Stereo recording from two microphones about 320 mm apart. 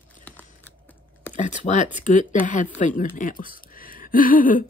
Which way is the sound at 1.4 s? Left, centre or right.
Left.